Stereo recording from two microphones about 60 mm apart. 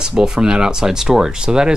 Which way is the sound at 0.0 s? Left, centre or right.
Centre.